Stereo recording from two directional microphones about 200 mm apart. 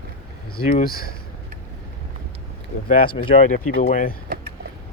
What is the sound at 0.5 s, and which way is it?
Speech, 45° left (ahead or behind).